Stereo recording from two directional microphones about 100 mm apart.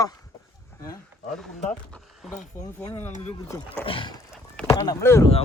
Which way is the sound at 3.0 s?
20° left (ahead or behind).